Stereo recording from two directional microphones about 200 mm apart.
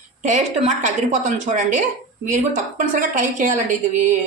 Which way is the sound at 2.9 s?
40° right (ahead or behind).